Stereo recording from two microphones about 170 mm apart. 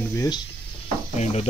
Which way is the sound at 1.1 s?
40° left (ahead or behind).